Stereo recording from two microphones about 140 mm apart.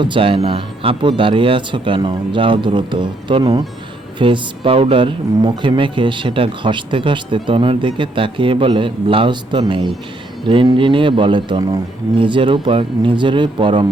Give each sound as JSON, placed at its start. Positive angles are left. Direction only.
{"t": 0.0, "sound": "speech", "side_deg": -40}